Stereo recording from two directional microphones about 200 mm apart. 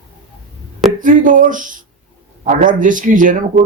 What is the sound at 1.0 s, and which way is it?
Speech, 40° right (ahead or behind).